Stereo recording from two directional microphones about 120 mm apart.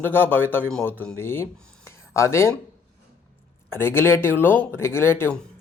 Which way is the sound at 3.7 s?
20° left (ahead or behind).